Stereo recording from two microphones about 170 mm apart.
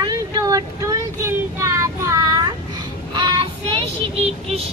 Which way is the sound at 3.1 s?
30° right (ahead or behind).